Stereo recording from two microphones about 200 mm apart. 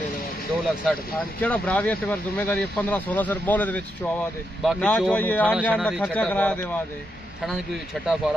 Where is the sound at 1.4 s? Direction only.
5° left (ahead or behind).